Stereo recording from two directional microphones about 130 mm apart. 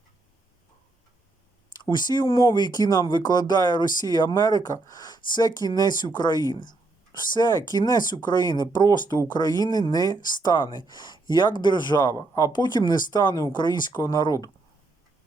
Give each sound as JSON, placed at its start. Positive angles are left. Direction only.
{"t": 1.7, "sound": "speech", "side_deg": 35}